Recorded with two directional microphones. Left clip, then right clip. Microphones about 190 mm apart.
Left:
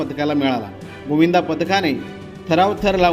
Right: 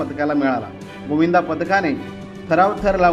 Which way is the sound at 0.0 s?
35° left (ahead or behind).